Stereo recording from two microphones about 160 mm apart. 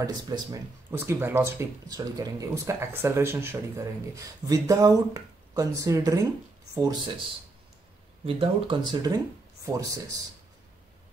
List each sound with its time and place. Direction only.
0.0 s speech: 20° right (ahead or behind)
8.3 s speech: 35° right (ahead or behind)